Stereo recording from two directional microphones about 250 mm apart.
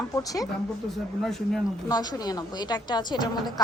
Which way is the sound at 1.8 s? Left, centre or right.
Centre.